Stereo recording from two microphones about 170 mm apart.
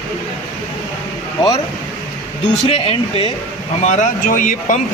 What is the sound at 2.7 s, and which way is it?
Speech, 35° left (ahead or behind).